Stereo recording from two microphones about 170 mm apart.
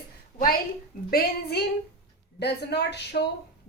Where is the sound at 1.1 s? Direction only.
70° left (ahead or behind).